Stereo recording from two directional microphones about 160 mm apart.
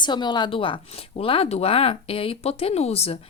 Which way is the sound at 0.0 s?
30° left (ahead or behind).